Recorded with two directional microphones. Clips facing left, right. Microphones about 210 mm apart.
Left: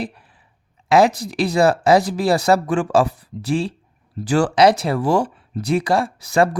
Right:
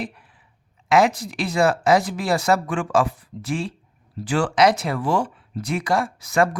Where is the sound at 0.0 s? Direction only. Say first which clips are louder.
Left 3 dB; 35° left (ahead or behind).